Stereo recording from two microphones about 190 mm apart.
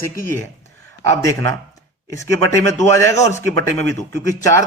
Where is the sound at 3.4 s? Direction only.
90° right.